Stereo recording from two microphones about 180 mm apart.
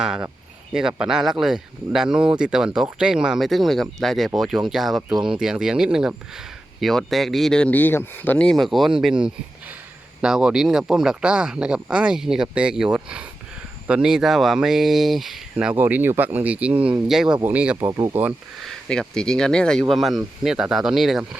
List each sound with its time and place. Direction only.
0.0 s speech: 5° right (ahead or behind)
18.6 s speech: 5° left (ahead or behind)